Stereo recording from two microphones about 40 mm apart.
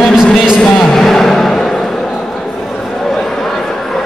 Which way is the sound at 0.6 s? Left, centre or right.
Centre.